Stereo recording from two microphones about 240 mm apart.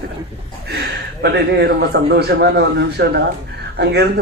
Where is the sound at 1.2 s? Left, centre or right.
Right.